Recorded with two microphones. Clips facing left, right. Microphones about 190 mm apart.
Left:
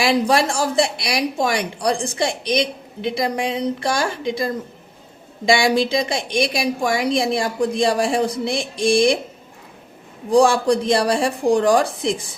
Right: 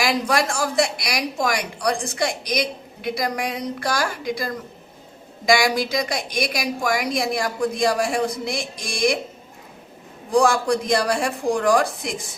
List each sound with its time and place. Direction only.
0.0 s speech: 30° left (ahead or behind)
10.3 s speech: 30° left (ahead or behind)